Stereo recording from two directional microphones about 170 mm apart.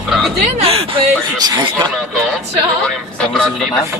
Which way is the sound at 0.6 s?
35° right (ahead or behind).